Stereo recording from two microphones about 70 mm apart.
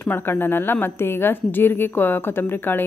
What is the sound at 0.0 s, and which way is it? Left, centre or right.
A woman's voice, left.